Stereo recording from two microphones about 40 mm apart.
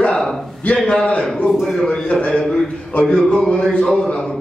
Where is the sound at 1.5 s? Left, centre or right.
Centre.